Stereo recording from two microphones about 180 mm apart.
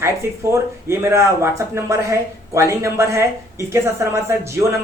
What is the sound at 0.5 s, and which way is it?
Speech, 15° right (ahead or behind).